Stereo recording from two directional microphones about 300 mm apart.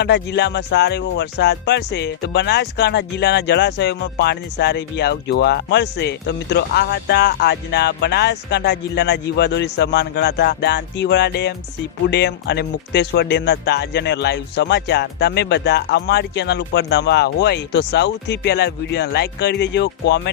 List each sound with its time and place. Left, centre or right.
0.0 s speech: left